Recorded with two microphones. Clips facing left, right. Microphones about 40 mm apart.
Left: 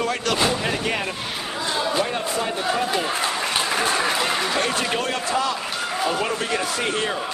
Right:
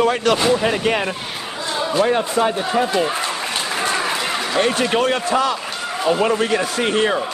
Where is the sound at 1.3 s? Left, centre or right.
Centre.